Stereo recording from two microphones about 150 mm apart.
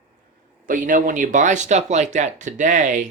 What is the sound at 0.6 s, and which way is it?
Speech, 60° right (ahead or behind).